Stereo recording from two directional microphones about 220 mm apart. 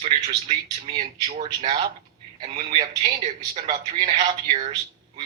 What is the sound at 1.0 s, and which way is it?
A man's voice, 30° right (ahead or behind).